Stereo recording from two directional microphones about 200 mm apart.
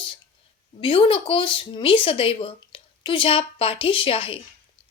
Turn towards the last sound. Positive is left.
turn(degrees=25)  # may be behind; listen again after turning